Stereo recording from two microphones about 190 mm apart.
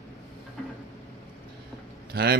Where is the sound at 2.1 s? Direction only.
55° right (ahead or behind).